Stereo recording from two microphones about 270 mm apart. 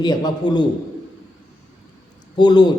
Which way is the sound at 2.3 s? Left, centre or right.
Centre.